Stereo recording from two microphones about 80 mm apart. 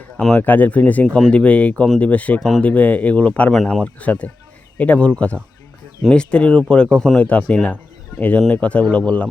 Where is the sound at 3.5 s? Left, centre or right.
Centre.